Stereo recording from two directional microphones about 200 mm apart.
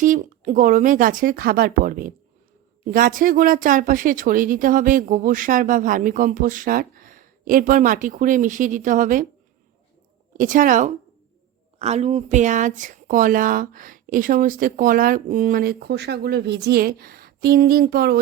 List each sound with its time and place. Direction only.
0.0 s speech: 40° right (ahead or behind)
10.3 s speech: 40° right (ahead or behind)